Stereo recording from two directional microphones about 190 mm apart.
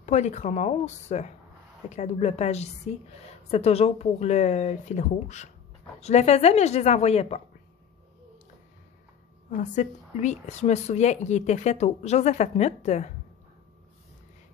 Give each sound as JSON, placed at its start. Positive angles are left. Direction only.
{"t": 0.0, "sound": "a woman's voice", "side_deg": 40}
{"t": 9.5, "sound": "a woman's voice", "side_deg": 40}